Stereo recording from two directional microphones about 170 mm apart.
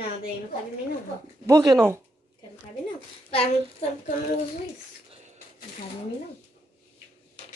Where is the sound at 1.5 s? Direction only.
25° right (ahead or behind).